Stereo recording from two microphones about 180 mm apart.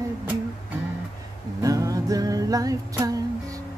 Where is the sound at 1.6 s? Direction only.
20° right (ahead or behind).